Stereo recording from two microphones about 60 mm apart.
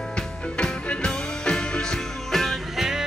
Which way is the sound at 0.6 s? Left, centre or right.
Centre.